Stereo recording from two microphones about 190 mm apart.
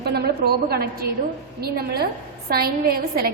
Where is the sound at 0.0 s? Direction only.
55° right (ahead or behind).